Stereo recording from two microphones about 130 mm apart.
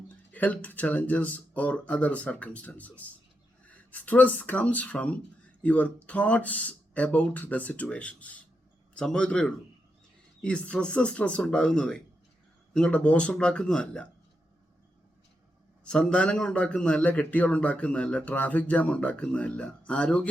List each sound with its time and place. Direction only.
0.3 s a man's voice: 10° left (ahead or behind)
15.8 s a man's voice: 5° left (ahead or behind)